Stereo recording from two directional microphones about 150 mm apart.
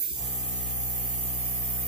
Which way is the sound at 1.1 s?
55° left (ahead or behind).